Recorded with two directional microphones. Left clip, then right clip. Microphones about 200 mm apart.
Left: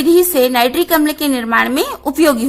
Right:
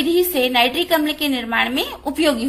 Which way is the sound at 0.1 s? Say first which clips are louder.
Left 8 dB; 30° left (ahead or behind).